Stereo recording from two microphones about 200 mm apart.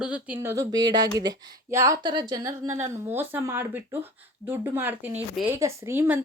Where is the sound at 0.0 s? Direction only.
5° right (ahead or behind).